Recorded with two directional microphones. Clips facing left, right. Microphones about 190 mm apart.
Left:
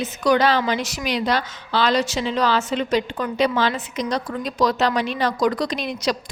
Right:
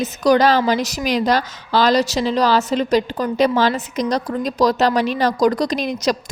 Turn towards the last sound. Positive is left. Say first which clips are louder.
# right 4 dB
turn(degrees=-45)  # may be behind; listen again after turning